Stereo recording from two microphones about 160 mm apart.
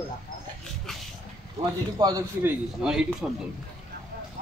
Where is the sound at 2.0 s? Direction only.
25° right (ahead or behind).